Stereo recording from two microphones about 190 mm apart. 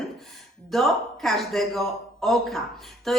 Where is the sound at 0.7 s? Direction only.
Centre (ahead or behind).